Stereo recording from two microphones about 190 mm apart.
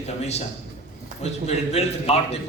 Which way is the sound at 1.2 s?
35° left (ahead or behind).